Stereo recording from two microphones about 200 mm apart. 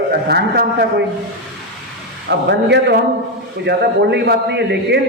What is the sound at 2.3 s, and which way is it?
A man's voice, 60° right (ahead or behind).